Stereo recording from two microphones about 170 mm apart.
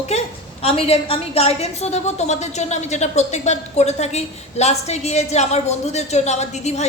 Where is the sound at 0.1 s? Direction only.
40° left (ahead or behind).